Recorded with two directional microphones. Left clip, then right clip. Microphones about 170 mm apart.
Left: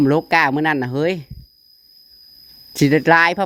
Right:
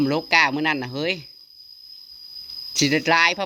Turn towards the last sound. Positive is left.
turn(degrees=65)  # may be behind; listen again after turning